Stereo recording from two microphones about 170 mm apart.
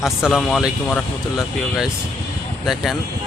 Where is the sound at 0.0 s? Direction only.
Centre (ahead or behind).